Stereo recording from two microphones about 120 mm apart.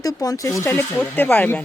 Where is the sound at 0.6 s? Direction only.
15° left (ahead or behind).